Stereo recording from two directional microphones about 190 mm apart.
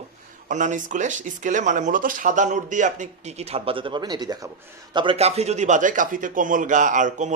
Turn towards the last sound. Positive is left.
turn(degrees=-40)  # may be behind; listen again after turning